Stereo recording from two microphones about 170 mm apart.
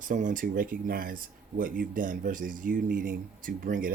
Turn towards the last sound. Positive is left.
turn(degrees=-55)  # may be behind; listen again after turning